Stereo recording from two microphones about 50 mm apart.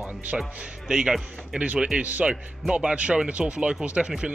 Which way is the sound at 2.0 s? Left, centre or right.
Right.